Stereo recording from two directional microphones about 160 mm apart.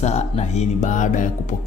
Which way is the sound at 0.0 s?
45° left (ahead or behind).